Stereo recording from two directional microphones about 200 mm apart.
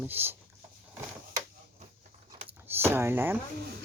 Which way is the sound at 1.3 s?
35° right (ahead or behind).